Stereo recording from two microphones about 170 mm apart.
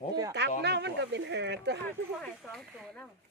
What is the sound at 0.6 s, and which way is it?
Speech, 85° right.